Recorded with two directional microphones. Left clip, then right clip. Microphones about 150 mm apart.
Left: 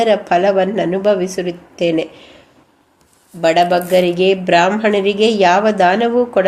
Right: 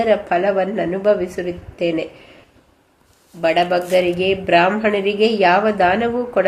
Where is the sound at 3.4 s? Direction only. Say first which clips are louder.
Left 4 dB; 35° left (ahead or behind).